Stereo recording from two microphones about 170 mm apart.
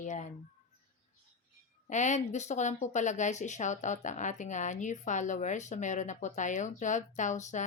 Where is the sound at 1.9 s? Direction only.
45° left (ahead or behind).